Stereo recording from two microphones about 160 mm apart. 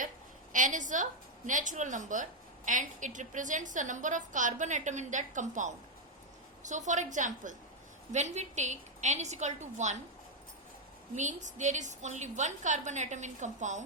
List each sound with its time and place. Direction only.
0.5 s a woman's voice: 55° right (ahead or behind)
11.1 s a woman's voice: 50° right (ahead or behind)